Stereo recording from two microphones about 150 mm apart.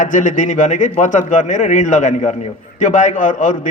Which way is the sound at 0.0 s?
55° left (ahead or behind).